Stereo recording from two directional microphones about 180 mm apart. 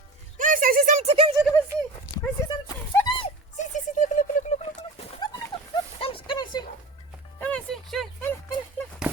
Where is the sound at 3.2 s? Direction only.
40° left (ahead or behind).